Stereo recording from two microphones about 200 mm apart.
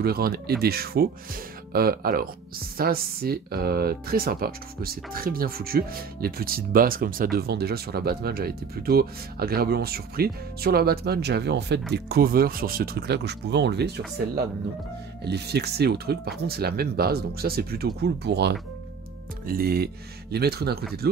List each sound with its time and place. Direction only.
0.0 s speech: 50° right (ahead or behind)